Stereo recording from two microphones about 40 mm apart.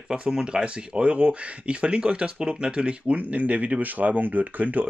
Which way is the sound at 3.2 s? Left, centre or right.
Right.